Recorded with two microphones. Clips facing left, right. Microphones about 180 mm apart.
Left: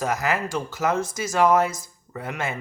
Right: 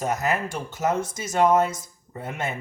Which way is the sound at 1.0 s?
25° right (ahead or behind).